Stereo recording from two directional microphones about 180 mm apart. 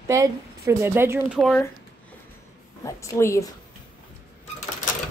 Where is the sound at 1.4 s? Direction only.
5° left (ahead or behind).